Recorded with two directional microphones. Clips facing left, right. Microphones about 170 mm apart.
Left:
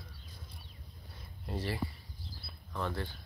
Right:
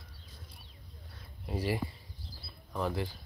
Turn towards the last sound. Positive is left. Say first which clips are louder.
# right 3 dB
turn(degrees=-5)  # may be behind; listen again after turning